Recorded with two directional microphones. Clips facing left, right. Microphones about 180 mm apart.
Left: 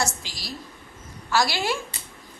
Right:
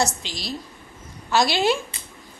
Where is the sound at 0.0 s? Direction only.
20° right (ahead or behind).